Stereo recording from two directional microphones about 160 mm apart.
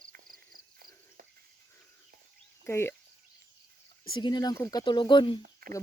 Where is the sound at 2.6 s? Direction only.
15° left (ahead or behind).